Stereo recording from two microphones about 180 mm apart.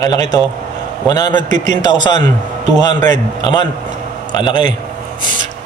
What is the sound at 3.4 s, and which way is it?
A man's voice, 25° left (ahead or behind).